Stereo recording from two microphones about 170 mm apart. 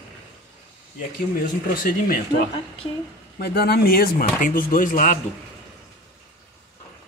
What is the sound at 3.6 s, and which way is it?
Speech, 65° left (ahead or behind).